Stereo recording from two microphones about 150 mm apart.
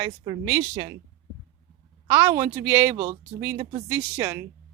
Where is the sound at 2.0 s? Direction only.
15° right (ahead or behind).